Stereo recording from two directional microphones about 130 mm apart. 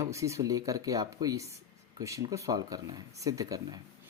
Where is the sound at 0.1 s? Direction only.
25° right (ahead or behind).